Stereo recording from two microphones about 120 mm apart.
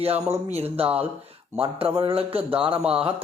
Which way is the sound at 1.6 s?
50° right (ahead or behind).